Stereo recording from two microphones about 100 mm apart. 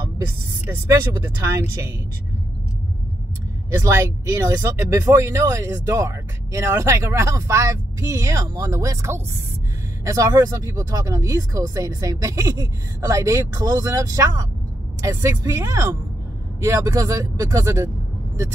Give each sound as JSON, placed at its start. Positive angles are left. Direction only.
{"t": 1.4, "sound": "speech", "side_deg": -30}
{"t": 3.7, "sound": "speech", "side_deg": -30}